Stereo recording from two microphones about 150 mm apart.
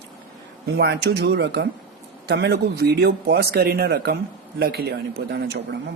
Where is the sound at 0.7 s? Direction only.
90° right.